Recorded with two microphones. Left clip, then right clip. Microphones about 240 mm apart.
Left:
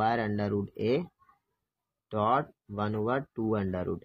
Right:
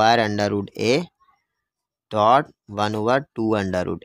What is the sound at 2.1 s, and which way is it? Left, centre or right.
Speech, right.